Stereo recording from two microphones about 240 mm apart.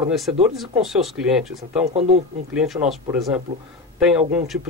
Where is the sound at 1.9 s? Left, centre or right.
Right.